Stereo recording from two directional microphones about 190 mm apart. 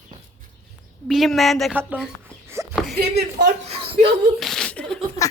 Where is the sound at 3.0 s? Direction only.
60° right (ahead or behind).